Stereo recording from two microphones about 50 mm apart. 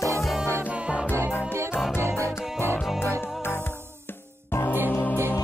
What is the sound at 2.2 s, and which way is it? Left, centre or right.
Music, right.